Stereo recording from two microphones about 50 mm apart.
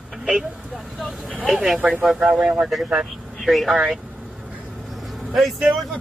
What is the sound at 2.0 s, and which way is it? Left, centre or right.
Speech, centre.